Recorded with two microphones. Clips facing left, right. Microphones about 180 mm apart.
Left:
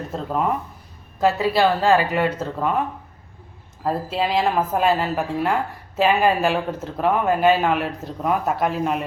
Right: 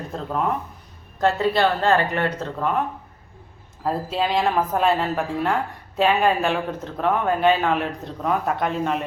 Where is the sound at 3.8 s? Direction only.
Centre (ahead or behind).